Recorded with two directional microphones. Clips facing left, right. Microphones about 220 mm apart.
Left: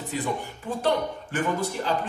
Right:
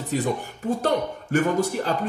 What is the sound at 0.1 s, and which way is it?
Speech, 45° right (ahead or behind).